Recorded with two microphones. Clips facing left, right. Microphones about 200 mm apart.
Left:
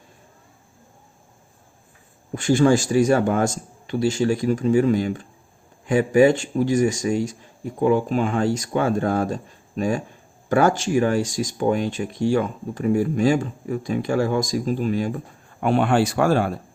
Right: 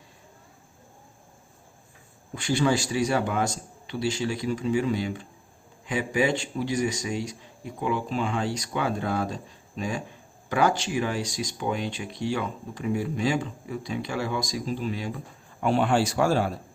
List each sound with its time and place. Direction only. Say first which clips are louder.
2.3 s speech: left 7 dB; 45° left (ahead or behind)
15.6 s speech: left 4 dB; 60° left (ahead or behind)